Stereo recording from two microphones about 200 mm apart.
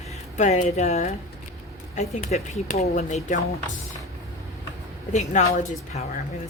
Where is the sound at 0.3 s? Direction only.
35° left (ahead or behind).